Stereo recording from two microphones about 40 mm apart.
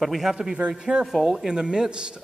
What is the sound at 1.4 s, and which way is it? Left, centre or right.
Speech, centre.